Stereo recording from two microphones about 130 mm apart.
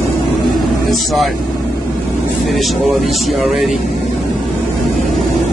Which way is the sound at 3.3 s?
Centre (ahead or behind).